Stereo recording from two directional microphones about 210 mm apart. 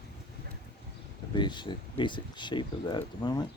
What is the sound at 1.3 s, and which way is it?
Speech, 20° left (ahead or behind).